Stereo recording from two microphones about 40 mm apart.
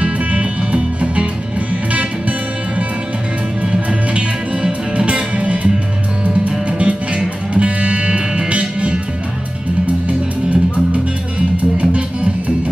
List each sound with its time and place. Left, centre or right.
0.0 s music: right
4.6 s music: right
10.0 s music: right